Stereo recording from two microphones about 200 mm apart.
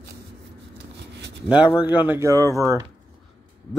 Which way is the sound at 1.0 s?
60° right (ahead or behind).